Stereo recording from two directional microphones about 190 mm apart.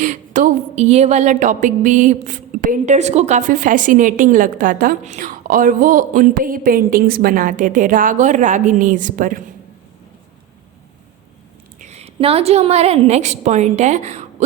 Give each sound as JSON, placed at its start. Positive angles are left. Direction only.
{"t": 0.0, "sound": "a woman's voice", "side_deg": -40}
{"t": 11.8, "sound": "a woman's voice", "side_deg": -35}